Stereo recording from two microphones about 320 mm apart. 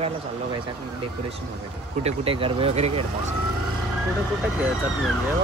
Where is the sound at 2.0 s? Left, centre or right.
Centre.